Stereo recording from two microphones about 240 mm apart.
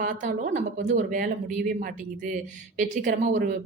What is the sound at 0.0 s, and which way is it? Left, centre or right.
A woman's voice, right.